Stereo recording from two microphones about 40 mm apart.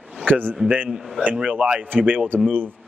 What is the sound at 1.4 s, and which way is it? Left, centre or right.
Speech, right.